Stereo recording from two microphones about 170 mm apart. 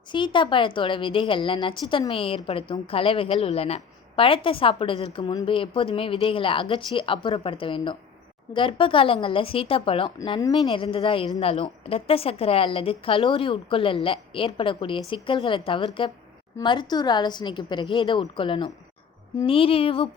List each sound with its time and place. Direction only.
0.1 s a woman's voice: 30° left (ahead or behind)